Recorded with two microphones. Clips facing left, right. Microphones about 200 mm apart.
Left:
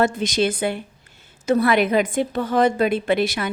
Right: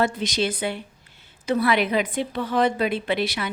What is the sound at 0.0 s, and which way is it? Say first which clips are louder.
A woman's voice: left 4 dB; 50° left (ahead or behind).